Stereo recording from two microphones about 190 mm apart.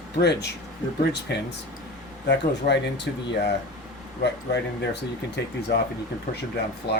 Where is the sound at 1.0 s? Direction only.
60° left (ahead or behind).